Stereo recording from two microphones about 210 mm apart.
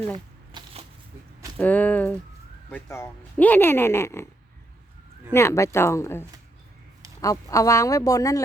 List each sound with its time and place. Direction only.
0.5 s a sound: 25° right (ahead or behind)
1.5 s speech: 5° left (ahead or behind)
5.3 s speech: 15° left (ahead or behind)